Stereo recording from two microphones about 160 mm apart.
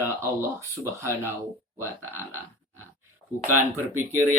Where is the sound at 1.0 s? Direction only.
15° right (ahead or behind).